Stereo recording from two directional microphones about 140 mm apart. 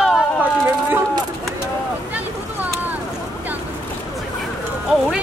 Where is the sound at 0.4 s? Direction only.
15° right (ahead or behind).